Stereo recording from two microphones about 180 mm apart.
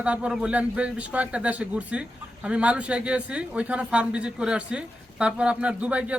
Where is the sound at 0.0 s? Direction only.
5° right (ahead or behind).